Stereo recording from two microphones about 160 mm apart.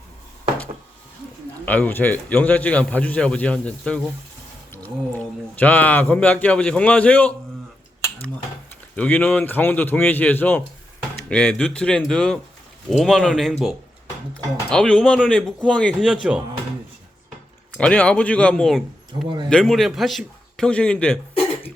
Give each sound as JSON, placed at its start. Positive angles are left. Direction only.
{"t": 1.6, "sound": "a man's voice", "side_deg": 10}
{"t": 9.0, "sound": "a man's voice", "side_deg": 10}
{"t": 17.7, "sound": "a man's voice", "side_deg": 5}